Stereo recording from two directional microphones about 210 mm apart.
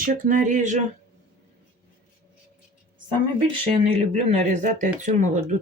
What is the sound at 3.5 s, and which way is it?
Speech, 25° right (ahead or behind).